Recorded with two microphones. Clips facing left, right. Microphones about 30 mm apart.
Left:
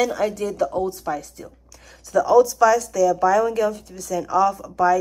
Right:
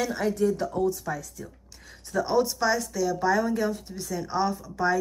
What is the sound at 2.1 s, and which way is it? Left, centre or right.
Speech, left.